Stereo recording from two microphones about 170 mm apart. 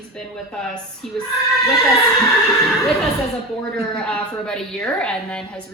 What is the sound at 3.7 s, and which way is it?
A woman's voice, 5° left (ahead or behind).